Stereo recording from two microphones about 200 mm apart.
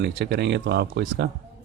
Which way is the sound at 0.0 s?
55° right (ahead or behind).